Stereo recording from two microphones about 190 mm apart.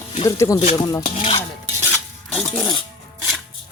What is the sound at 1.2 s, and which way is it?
Stir, 30° left (ahead or behind).